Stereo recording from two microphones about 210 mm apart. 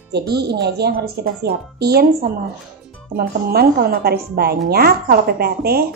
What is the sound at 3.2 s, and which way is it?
A woman's voice, 45° right (ahead or behind).